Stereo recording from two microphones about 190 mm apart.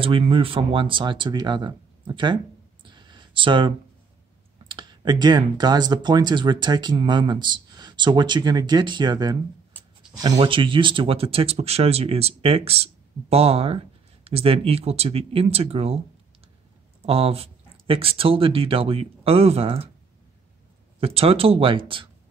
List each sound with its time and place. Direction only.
0.0 s speech: 30° right (ahead or behind)
17.0 s speech: 30° right (ahead or behind)
21.0 s speech: 30° right (ahead or behind)